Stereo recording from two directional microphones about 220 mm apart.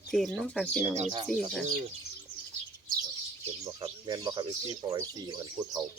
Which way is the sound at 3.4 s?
20° right (ahead or behind).